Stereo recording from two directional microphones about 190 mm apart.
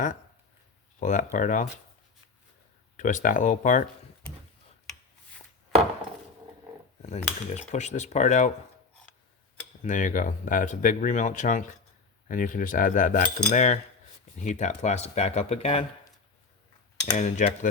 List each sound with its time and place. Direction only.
0.9 s speech: 40° left (ahead or behind)
3.0 s cutlery: 45° left (ahead or behind)
7.0 s cutlery: 35° left (ahead or behind)
7.7 s speech: 40° left (ahead or behind)
9.8 s speech: 40° left (ahead or behind)
12.3 s cutlery: 45° left (ahead or behind)
14.3 s speech: 40° left (ahead or behind)
17.2 s speech: 40° left (ahead or behind)